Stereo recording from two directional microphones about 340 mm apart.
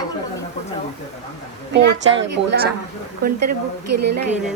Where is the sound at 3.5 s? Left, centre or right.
Right.